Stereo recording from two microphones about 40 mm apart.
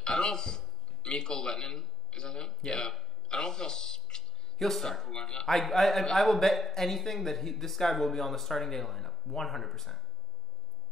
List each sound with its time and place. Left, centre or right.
0.0 s a man's voice: centre
4.6 s speech: centre
5.2 s a man's voice: centre
5.5 s speech: centre